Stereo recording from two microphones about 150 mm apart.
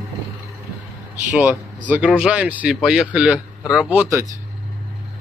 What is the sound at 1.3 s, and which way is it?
Speech, 10° right (ahead or behind).